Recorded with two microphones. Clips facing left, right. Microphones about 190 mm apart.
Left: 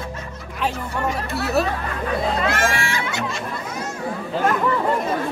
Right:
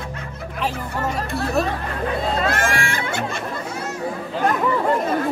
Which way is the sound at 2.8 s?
50° right (ahead or behind).